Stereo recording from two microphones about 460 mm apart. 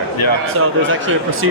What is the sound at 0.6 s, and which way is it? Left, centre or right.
Speech, right.